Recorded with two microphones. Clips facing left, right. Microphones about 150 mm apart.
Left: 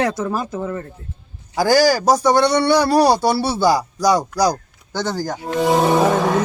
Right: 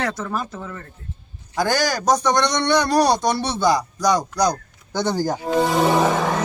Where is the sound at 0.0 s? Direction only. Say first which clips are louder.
Left 5 dB; 15° left (ahead or behind).